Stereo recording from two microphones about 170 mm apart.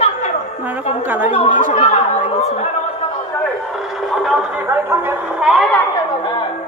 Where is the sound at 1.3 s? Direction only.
40° left (ahead or behind).